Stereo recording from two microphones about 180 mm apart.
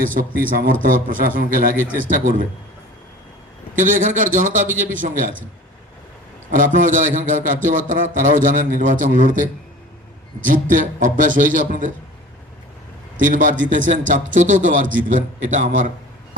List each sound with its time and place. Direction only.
0.1 s a man's voice: 50° right (ahead or behind)
3.8 s a man's voice: 45° right (ahead or behind)
6.5 s a man's voice: 45° right (ahead or behind)
13.1 s a man's voice: 45° right (ahead or behind)